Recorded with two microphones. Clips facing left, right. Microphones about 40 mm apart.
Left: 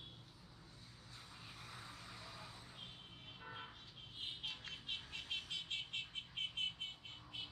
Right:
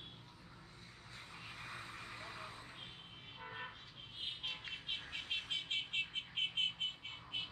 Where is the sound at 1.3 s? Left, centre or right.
Right.